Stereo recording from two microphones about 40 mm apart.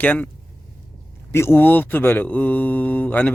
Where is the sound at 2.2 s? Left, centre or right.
Left.